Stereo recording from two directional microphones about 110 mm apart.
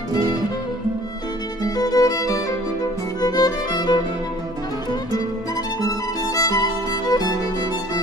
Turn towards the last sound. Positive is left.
turn(degrees=35)  # may be behind; listen again after turning